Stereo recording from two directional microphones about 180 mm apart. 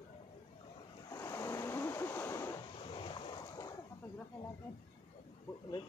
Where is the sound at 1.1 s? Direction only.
15° left (ahead or behind).